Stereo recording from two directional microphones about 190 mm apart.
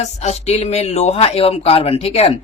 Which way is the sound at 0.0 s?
35° left (ahead or behind).